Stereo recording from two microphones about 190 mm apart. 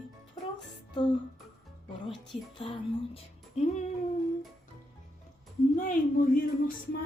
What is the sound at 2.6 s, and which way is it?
Speech, 30° left (ahead or behind).